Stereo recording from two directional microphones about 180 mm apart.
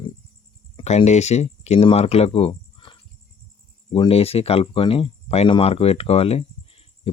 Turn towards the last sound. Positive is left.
turn(degrees=30)  # may be behind; listen again after turning